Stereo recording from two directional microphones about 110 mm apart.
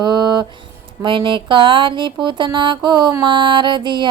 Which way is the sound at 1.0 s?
45° right (ahead or behind).